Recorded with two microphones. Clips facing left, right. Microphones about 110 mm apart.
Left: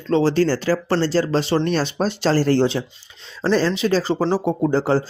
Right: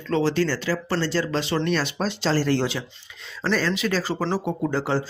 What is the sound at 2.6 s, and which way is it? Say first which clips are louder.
Speech: left 7 dB; 30° left (ahead or behind).